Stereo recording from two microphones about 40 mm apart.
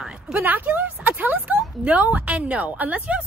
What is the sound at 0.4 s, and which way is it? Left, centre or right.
Speech, right.